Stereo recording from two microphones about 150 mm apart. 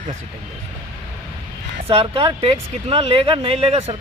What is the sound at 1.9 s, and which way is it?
Speech, 40° right (ahead or behind).